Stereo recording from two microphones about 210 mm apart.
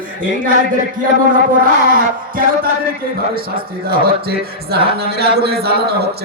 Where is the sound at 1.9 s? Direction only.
40° right (ahead or behind).